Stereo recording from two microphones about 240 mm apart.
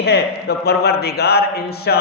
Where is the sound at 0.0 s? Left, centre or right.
Left.